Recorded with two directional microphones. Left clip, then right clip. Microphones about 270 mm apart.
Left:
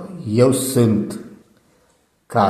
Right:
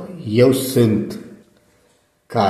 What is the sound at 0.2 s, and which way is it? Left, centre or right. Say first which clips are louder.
Speech: right 1 dB; centre.